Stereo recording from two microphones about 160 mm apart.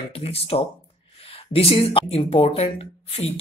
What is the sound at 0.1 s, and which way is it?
Speech, 35° left (ahead or behind).